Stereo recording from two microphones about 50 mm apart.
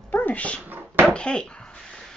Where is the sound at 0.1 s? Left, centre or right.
Left.